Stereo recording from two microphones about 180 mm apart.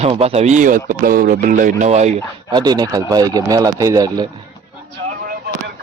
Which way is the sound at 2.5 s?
20° right (ahead or behind).